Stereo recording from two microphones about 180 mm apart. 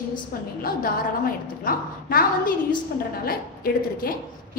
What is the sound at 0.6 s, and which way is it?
A woman's voice, 55° left (ahead or behind).